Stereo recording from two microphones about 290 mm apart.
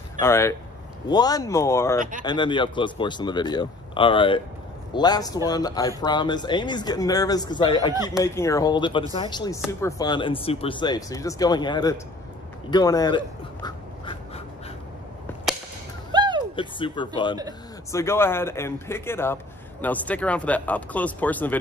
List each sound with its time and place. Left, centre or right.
0.2 s speech: centre
2.0 s speech: right
2.2 s speech: centre
7.9 s speech: centre
8.2 s speech: centre
12.7 s duck: centre
16.1 s music: centre
16.5 s a man's voice: centre